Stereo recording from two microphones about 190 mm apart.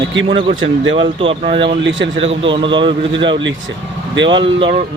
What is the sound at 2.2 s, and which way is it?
Speech, 30° right (ahead or behind).